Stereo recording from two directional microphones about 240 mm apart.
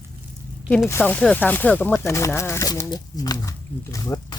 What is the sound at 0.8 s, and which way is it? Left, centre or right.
Speech, centre.